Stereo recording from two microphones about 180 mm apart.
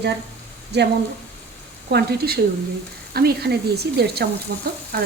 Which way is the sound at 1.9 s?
60° right (ahead or behind).